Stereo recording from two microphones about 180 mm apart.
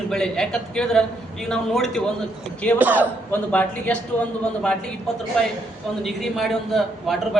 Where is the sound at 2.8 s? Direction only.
10° right (ahead or behind).